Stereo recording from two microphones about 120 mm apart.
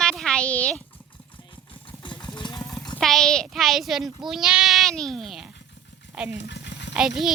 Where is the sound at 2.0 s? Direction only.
40° left (ahead or behind).